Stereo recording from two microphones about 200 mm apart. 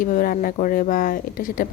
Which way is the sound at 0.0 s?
45° left (ahead or behind).